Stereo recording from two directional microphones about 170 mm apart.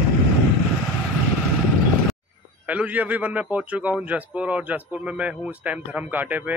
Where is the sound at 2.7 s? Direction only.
10° right (ahead or behind).